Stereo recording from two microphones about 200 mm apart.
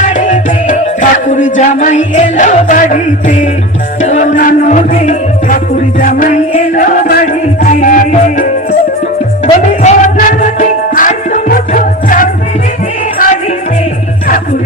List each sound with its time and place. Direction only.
0.1 s music: 40° left (ahead or behind)
9.8 s music: 40° left (ahead or behind)